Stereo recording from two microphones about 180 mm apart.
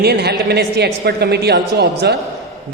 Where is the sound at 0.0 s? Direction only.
65° right (ahead or behind).